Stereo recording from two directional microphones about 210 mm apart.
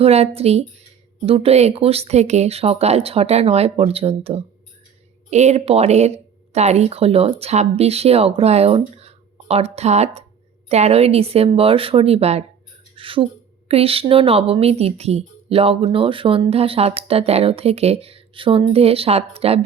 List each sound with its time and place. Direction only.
0.0 s a woman's voice: 30° right (ahead or behind)